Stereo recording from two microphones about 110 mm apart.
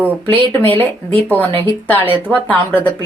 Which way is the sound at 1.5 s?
50° right (ahead or behind).